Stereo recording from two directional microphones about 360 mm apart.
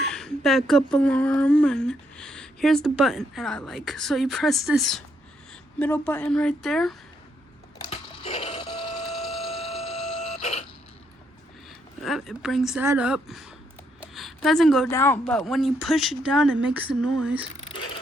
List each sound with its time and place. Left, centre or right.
0.0 s speech: centre
7.9 s printer: centre
9.0 s a sound: centre
9.3 s alarm clock: centre
12.0 s speech: centre